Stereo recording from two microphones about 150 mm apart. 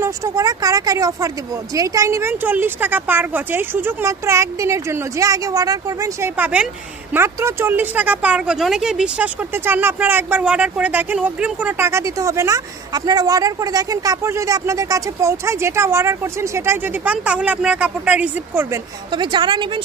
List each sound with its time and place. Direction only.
0.0 s a woman's voice: 20° right (ahead or behind)
19.1 s a woman's voice: 30° right (ahead or behind)